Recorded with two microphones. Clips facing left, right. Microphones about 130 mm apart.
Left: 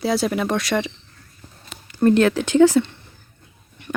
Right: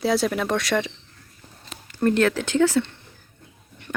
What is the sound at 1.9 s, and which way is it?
A woman's voice, 15° left (ahead or behind).